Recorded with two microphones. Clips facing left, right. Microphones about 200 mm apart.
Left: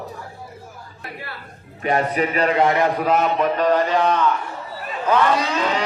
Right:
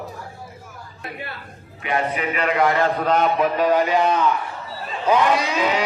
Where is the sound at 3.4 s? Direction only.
5° right (ahead or behind).